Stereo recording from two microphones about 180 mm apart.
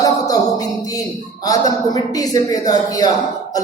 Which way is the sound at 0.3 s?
20° left (ahead or behind).